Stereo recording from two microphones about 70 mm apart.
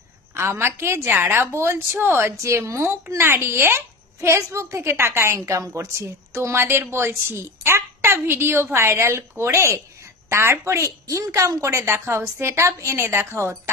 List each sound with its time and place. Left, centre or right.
0.3 s a woman's voice: right